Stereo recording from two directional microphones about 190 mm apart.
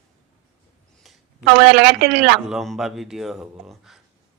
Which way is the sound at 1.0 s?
Centre (ahead or behind).